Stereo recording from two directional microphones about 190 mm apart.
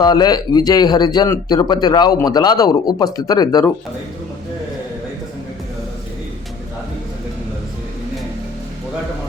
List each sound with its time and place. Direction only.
0.0 s speech: 20° left (ahead or behind)